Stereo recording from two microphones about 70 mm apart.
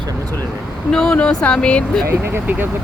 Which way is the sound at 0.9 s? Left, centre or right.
Centre.